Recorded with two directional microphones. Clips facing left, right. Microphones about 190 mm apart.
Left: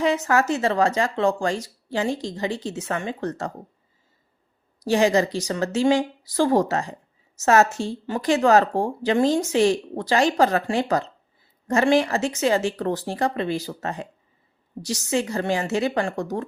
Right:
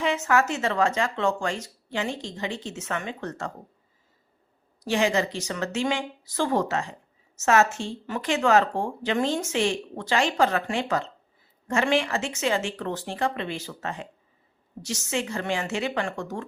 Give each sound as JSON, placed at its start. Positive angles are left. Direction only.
{"t": 0.0, "sound": "speech", "side_deg": 35}
{"t": 4.8, "sound": "speech", "side_deg": 40}